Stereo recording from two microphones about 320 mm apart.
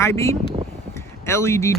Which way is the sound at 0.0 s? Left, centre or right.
Centre.